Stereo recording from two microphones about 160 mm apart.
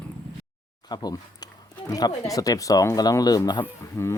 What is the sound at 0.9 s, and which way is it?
Speech, 25° left (ahead or behind).